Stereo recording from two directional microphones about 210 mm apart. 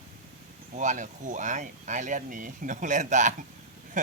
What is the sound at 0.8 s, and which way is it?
Speech, 35° right (ahead or behind).